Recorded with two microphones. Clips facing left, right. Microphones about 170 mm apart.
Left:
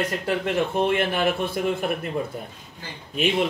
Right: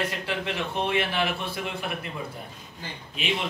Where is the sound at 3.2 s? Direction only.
50° left (ahead or behind).